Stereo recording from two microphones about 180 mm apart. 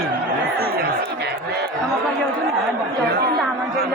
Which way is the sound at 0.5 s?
60° right (ahead or behind).